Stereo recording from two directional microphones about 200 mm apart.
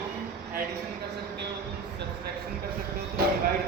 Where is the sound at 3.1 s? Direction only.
50° right (ahead or behind).